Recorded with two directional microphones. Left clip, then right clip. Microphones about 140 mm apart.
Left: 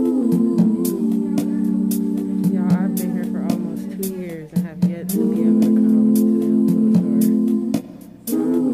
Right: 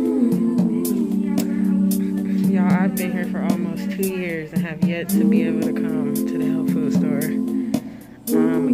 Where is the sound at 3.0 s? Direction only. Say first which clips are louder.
Even; 15° left (ahead or behind).